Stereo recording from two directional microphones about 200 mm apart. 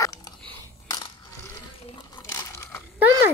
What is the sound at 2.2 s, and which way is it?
Crumpling, 15° left (ahead or behind).